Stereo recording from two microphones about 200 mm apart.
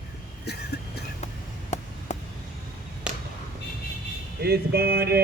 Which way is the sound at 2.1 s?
35° left (ahead or behind).